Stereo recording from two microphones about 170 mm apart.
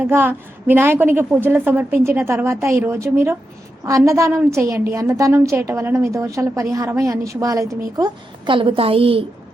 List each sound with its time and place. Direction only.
0.0 s a woman's voice: 10° right (ahead or behind); by 9.2 s 35° right (ahead or behind)